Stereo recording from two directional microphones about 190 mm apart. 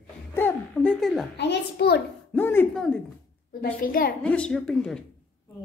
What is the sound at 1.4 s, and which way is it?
Speech, 60° left (ahead or behind).